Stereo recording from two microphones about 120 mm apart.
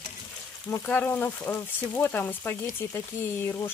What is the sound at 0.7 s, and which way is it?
Speech, 15° left (ahead or behind).